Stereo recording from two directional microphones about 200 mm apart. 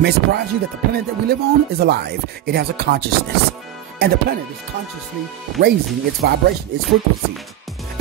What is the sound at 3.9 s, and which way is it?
Speech, 50° right (ahead or behind).